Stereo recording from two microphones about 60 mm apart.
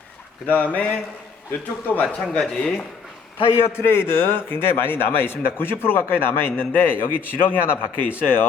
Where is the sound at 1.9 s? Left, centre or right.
Left.